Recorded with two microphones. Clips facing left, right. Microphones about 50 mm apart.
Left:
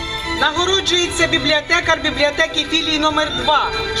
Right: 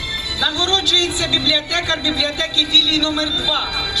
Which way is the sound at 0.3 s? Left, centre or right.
Left.